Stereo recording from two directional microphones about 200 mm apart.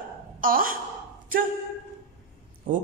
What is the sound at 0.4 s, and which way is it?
Speech, 45° right (ahead or behind).